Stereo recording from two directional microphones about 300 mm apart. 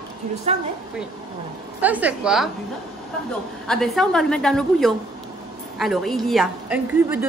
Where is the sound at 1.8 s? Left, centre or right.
Centre.